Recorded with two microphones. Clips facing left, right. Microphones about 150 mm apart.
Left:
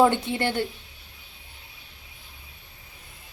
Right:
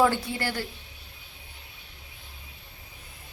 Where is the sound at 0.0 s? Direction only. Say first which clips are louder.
Left 4 dB; 25° left (ahead or behind).